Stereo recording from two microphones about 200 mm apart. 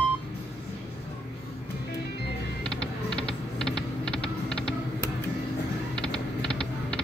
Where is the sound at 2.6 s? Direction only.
5° left (ahead or behind).